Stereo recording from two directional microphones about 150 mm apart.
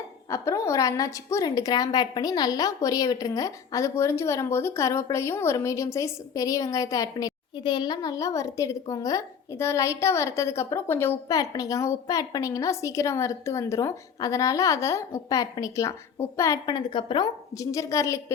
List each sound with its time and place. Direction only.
0.3 s a woman's voice: 20° left (ahead or behind)